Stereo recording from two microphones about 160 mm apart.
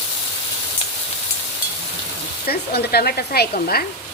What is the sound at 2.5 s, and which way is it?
Speech, 75° left (ahead or behind).